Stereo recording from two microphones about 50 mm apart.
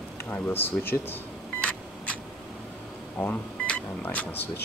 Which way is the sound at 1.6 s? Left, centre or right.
Left.